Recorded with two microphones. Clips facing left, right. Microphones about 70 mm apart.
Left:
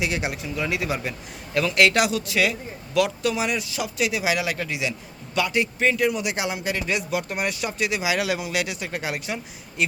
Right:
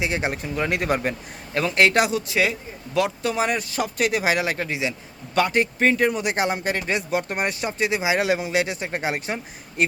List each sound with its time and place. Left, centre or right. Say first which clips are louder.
0.0 s a man's voice: right 2 dB; right
1.5 s a man's voice: right 1 dB; right